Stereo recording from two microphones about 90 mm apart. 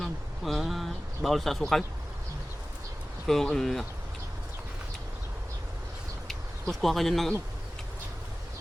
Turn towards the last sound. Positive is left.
turn(degrees=0)  # may be behind; listen again after turning